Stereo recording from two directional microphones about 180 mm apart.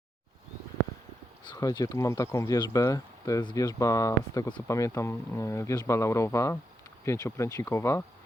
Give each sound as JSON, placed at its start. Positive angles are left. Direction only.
{"t": 1.5, "sound": "speech", "side_deg": 20}